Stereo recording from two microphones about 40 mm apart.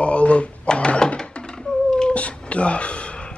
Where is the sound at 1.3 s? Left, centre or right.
Centre.